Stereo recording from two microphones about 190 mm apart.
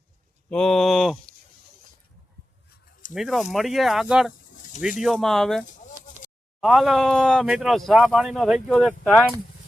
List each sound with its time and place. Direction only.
0.5 s speech: centre (ahead or behind)
3.2 s speech: centre (ahead or behind)
5.6 s bird: 45° left (ahead or behind)
6.6 s speech: centre (ahead or behind)